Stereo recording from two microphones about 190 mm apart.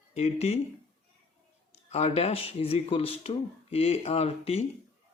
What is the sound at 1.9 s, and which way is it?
Speech, 35° left (ahead or behind).